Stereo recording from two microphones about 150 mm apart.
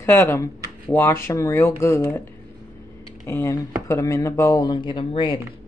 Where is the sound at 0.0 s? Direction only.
15° left (ahead or behind).